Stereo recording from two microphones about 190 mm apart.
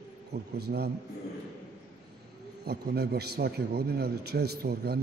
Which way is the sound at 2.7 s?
55° right (ahead or behind).